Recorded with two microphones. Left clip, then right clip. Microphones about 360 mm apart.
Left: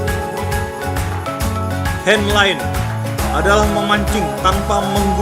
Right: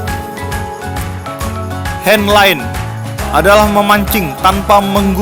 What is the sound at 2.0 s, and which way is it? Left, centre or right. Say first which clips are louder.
Speech: right 6 dB; right.